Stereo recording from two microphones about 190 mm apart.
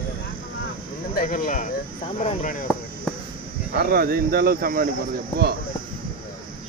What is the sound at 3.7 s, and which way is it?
Speech, 50° right (ahead or behind).